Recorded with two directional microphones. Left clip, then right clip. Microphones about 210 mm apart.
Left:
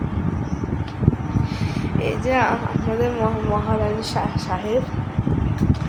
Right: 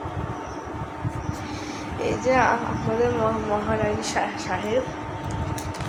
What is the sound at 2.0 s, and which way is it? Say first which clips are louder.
Speech: even; 15° left (ahead or behind).